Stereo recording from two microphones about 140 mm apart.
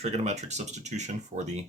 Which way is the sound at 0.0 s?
50° right (ahead or behind).